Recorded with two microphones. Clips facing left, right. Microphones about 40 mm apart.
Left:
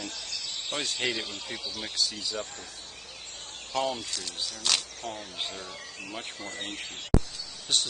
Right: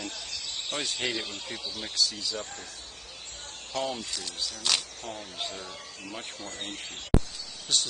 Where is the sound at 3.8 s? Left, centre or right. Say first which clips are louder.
Left 2 dB; centre.